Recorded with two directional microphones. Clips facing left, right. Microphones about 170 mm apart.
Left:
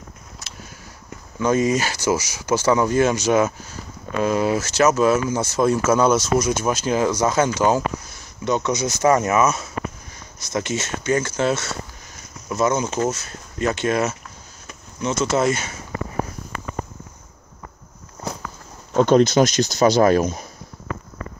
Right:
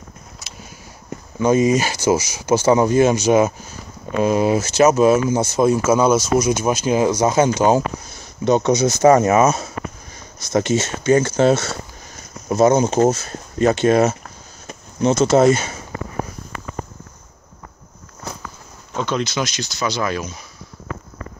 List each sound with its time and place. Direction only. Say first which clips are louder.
1.4 s speech: right 3 dB; 15° right (ahead or behind); by 15.7 s 30° right (ahead or behind)
18.9 s speech: left 8 dB; 45° left (ahead or behind)